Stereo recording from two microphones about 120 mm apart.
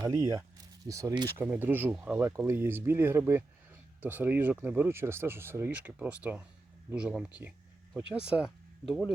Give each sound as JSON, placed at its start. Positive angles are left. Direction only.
{"t": 0.1, "sound": "speech", "side_deg": -25}
{"t": 1.4, "sound": "speech", "side_deg": -15}
{"t": 2.2, "sound": "speech", "side_deg": -20}